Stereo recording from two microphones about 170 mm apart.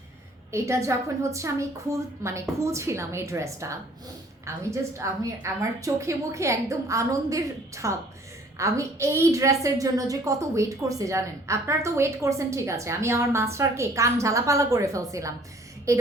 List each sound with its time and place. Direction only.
0.5 s a woman's voice: 15° right (ahead or behind)